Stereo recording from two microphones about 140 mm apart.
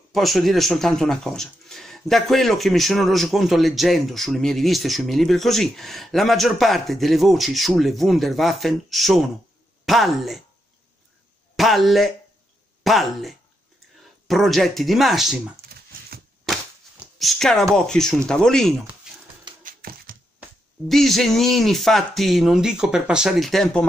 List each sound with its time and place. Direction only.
0.1 s speech: centre (ahead or behind)
11.5 s speech: centre (ahead or behind)
17.0 s speech: centre (ahead or behind)
19.1 s dog: 5° right (ahead or behind)
19.6 s a sound: 90° right
20.9 s speech: centre (ahead or behind)